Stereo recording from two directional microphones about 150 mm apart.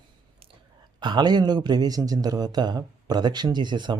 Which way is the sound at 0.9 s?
30° right (ahead or behind).